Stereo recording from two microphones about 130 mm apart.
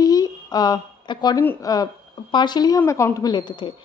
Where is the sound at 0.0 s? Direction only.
30° left (ahead or behind).